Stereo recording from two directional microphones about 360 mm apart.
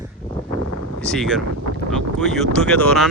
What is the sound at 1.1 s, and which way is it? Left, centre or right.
Speech, centre.